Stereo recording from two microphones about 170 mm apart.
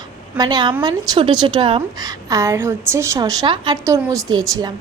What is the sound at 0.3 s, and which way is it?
A woman's voice, 25° right (ahead or behind).